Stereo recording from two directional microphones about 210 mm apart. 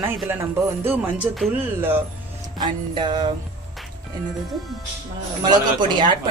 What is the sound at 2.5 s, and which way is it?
Speech, 20° right (ahead or behind).